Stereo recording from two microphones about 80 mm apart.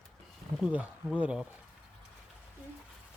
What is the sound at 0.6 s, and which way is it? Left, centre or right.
Speech, centre.